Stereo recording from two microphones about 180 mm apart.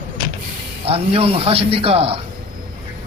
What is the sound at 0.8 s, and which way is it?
Speech, 35° right (ahead or behind).